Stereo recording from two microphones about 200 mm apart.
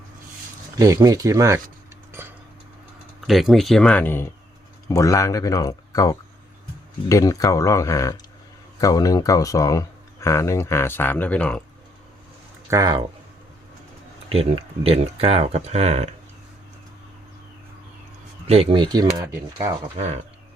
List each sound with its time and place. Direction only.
0.8 s speech: 15° right (ahead or behind)
3.2 s speech: centre (ahead or behind)
12.7 s speech: 20° right (ahead or behind)
14.3 s speech: 30° right (ahead or behind)
18.4 s speech: 30° right (ahead or behind)